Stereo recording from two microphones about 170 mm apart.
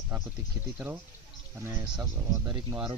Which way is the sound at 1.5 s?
10° right (ahead or behind).